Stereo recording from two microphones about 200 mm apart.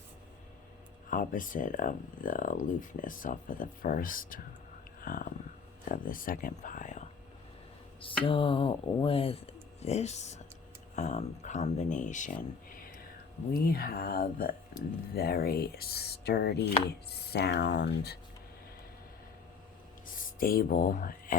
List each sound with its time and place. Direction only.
1.1 s speech: 40° left (ahead or behind)
8.2 s speech: 25° left (ahead or behind); by 18.2 s 55° left (ahead or behind)
20.1 s speech: 45° left (ahead or behind)